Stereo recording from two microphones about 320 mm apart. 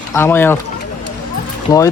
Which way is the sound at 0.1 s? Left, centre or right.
Centre.